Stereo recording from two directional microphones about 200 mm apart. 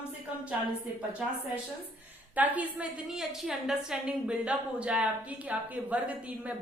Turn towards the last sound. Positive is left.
turn(degrees=-5)  # may be behind; listen again after turning